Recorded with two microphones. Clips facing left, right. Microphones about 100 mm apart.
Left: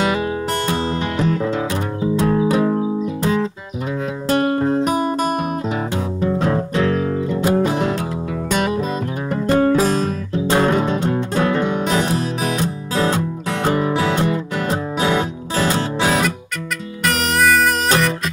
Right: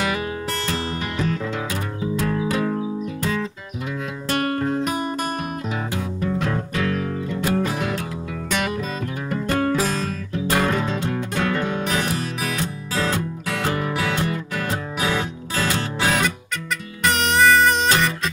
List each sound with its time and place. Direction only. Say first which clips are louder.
0.7 s music: left 6 dB; 25° left (ahead or behind)
4.3 s music: left 5 dB; 25° left (ahead or behind)
9.3 s music: left 6 dB; 25° left (ahead or behind)
17.0 s music: even; centre (ahead or behind)